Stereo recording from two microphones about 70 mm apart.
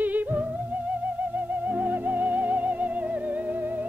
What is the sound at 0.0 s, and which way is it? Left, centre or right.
Music, right.